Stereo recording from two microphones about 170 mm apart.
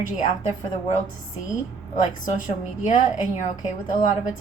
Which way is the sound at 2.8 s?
50° left (ahead or behind).